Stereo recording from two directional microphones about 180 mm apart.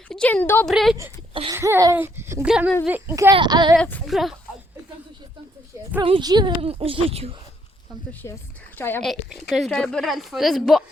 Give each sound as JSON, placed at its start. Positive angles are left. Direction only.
{"t": 0.1, "sound": "a woman's voice", "side_deg": 5}
{"t": 1.3, "sound": "a sound", "side_deg": -30}
{"t": 1.5, "sound": "a child's voice", "side_deg": -15}
{"t": 3.3, "sound": "speech", "side_deg": -25}
{"t": 3.8, "sound": "a woman's voice", "side_deg": 5}
{"t": 6.0, "sound": "speech", "side_deg": -25}
{"t": 8.2, "sound": "a woman's voice", "side_deg": 20}
{"t": 9.0, "sound": "a woman's voice", "side_deg": 0}